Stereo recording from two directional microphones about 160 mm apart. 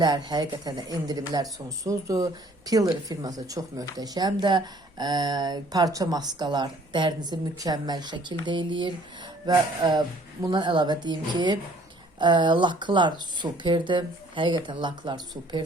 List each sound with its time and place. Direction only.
0.0 s speech: 25° right (ahead or behind)